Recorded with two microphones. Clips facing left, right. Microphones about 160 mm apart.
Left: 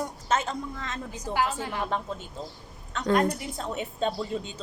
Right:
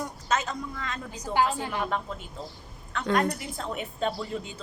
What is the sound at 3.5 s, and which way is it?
Speech, 25° left (ahead or behind).